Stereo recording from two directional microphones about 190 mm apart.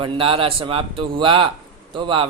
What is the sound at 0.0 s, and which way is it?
Speech, 30° right (ahead or behind).